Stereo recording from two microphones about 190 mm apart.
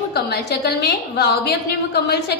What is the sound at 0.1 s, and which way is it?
A woman's voice, 55° left (ahead or behind).